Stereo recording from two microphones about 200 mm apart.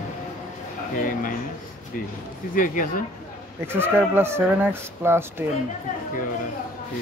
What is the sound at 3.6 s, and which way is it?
Speech, 10° right (ahead or behind).